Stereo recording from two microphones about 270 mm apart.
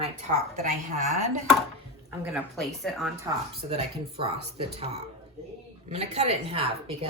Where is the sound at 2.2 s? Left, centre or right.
Centre.